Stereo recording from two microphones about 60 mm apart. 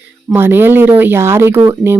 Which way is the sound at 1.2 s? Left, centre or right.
Right.